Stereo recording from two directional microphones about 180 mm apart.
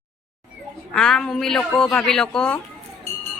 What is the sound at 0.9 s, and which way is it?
A woman's voice, 5° left (ahead or behind).